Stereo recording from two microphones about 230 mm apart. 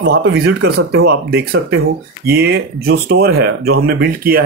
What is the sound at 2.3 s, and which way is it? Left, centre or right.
Speech, right.